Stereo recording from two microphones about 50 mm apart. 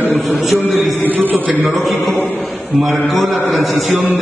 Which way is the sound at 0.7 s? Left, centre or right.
Centre.